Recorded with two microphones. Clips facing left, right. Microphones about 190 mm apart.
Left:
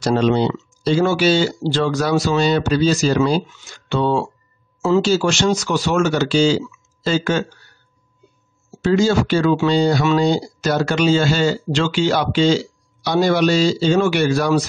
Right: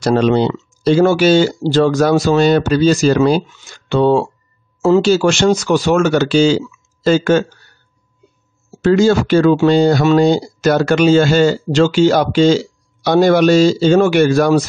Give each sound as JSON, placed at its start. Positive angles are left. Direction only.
{"t": 0.0, "sound": "speech", "side_deg": -65}
{"t": 7.1, "sound": "speech", "side_deg": -50}
{"t": 8.8, "sound": "speech", "side_deg": -55}